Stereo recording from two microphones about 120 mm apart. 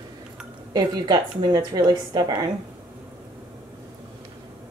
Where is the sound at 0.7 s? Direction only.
35° right (ahead or behind).